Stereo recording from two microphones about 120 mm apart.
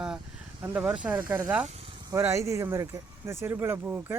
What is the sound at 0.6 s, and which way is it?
Speech, 10° right (ahead or behind).